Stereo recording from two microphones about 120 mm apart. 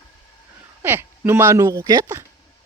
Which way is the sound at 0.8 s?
20° right (ahead or behind).